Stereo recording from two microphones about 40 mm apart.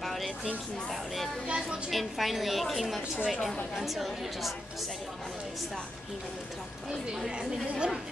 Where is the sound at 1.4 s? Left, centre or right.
Right.